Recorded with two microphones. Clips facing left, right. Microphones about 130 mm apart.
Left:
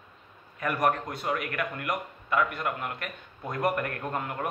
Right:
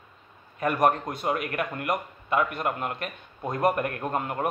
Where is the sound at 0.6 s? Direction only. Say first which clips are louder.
Right 4 dB; 25° right (ahead or behind).